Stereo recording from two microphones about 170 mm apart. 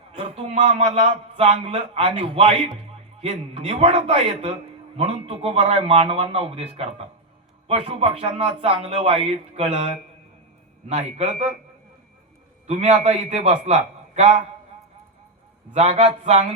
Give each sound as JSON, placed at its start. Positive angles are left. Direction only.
{"t": 0.2, "sound": "a man's voice", "side_deg": -30}
{"t": 12.6, "sound": "a man's voice", "side_deg": -40}
{"t": 15.7, "sound": "a man's voice", "side_deg": -35}